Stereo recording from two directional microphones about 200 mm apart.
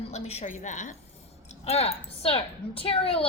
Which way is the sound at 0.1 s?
30° left (ahead or behind).